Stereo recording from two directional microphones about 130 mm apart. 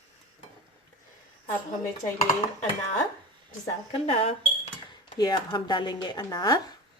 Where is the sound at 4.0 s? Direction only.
50° left (ahead or behind).